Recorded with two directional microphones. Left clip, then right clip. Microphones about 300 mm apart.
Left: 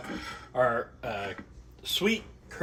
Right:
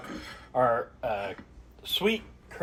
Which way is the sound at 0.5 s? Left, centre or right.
Centre.